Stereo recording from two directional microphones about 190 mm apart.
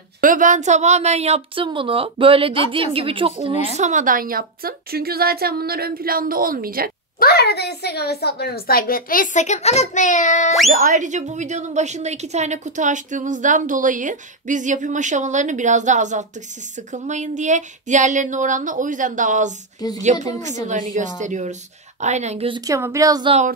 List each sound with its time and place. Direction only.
0.2 s a woman's voice: 45° right (ahead or behind); by 3.5 s 30° right (ahead or behind)
3.7 s a woman's voice: 40° right (ahead or behind)
7.2 s a woman's voice: 55° left (ahead or behind); by 10.5 s 40° left (ahead or behind)
10.7 s a woman's voice: 45° right (ahead or behind)
22.7 s speech: 15° right (ahead or behind)